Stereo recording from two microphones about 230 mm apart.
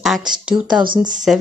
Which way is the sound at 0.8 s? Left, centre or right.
Right.